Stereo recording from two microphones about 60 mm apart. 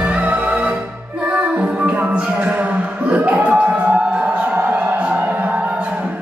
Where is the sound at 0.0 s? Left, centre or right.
Right.